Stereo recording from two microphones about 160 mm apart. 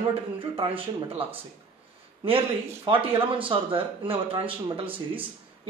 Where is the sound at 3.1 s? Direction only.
35° right (ahead or behind).